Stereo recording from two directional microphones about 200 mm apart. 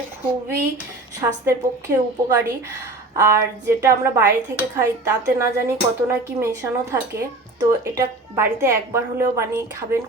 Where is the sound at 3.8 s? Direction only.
15° right (ahead or behind).